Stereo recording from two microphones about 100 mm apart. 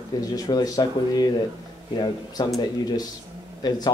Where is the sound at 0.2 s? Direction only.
40° left (ahead or behind).